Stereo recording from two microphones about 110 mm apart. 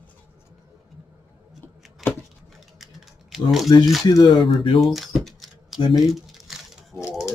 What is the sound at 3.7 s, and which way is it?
Speech, 35° left (ahead or behind).